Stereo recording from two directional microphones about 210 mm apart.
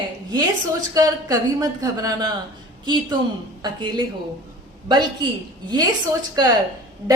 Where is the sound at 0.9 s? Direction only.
15° right (ahead or behind).